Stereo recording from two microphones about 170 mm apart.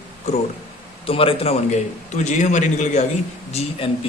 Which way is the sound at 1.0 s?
35° left (ahead or behind).